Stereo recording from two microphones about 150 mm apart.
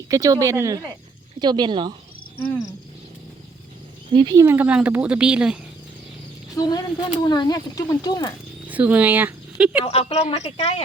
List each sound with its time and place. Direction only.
0.1 s speech: 25° right (ahead or behind)
4.1 s speech: 35° right (ahead or behind)
4.4 s speech: 15° right (ahead or behind)
6.6 s speech: 25° left (ahead or behind)
8.6 s speech: 10° right (ahead or behind)
9.8 s speech: 40° left (ahead or behind)